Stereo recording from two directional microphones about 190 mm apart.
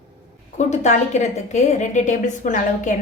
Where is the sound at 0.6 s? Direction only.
40° left (ahead or behind).